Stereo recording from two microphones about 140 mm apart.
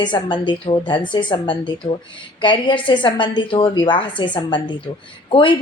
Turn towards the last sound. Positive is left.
turn(degrees=35)  # may be behind; listen again after turning